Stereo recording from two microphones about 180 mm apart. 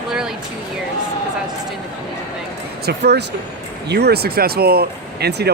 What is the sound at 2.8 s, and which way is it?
A man's voice, 65° right (ahead or behind).